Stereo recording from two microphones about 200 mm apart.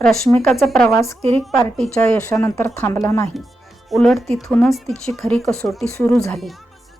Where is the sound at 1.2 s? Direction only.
30° right (ahead or behind).